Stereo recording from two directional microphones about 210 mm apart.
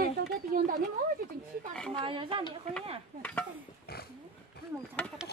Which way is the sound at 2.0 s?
25° right (ahead or behind).